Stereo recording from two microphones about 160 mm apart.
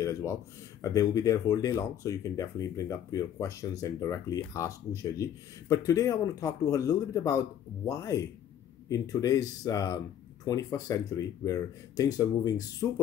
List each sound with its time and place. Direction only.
0.0 s speech: 20° left (ahead or behind)